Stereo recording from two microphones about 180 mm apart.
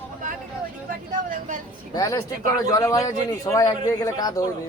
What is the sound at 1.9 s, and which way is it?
A man's voice, 20° left (ahead or behind).